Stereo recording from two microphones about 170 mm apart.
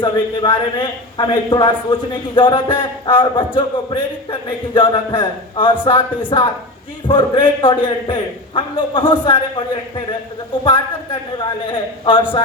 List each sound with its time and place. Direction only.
0.0 s a man's voice: 25° left (ahead or behind)